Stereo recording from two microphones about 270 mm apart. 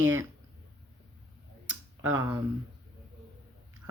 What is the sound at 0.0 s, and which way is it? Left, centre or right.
Speech, centre.